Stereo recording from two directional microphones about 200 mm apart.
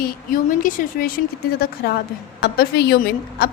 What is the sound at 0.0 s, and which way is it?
A woman's voice, 45° left (ahead or behind).